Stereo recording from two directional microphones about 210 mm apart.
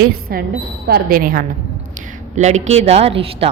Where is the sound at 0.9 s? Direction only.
45° right (ahead or behind); by 3.4 s 25° right (ahead or behind).